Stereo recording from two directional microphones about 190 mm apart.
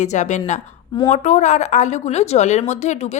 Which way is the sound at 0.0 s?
40° left (ahead or behind).